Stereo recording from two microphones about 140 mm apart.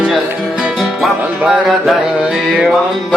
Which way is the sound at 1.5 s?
Centre (ahead or behind).